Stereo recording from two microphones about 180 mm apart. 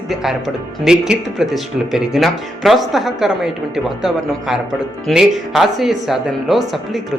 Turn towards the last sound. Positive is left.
turn(degrees=0)  # may be behind; listen again after turning